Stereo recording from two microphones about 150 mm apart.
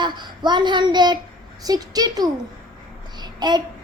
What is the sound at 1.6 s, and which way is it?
Speech, 25° right (ahead or behind).